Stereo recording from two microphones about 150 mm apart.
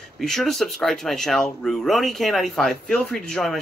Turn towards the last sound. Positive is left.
turn(degrees=0)  # may be behind; listen again after turning